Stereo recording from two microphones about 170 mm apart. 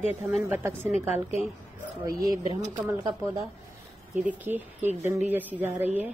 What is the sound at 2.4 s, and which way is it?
Speech, 45° right (ahead or behind).